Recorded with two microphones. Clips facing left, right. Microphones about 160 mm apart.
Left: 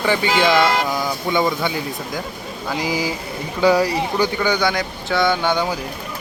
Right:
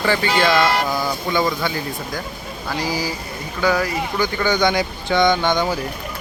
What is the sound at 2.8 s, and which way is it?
Speech, 20° left (ahead or behind).